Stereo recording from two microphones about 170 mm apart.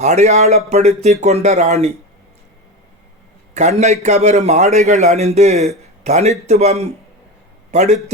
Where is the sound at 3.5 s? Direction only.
40° right (ahead or behind).